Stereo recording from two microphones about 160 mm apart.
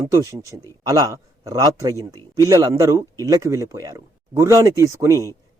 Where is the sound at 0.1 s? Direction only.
20° right (ahead or behind).